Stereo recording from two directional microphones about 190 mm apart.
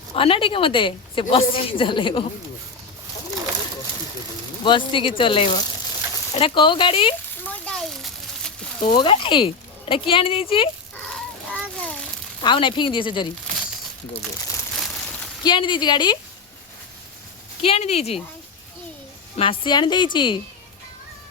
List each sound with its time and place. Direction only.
0.1 s a woman's voice: 30° left (ahead or behind)
4.6 s a woman's voice: 25° left (ahead or behind)
7.4 s a sound: 5° left (ahead or behind)
9.0 s a woman's voice: 25° left (ahead or behind)
10.9 s a sound: 5° left (ahead or behind)
12.4 s a woman's voice: 25° left (ahead or behind)
15.4 s a woman's voice: 25° left (ahead or behind)
17.6 s speech: 30° left (ahead or behind)
19.4 s a woman's voice: 25° left (ahead or behind)